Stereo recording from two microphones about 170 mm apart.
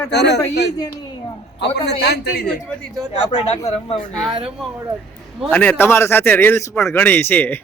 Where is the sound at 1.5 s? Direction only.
85° left.